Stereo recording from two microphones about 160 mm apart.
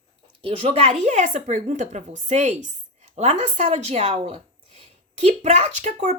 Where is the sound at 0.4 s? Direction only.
35° right (ahead or behind).